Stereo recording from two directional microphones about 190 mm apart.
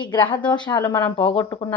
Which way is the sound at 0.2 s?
10° left (ahead or behind).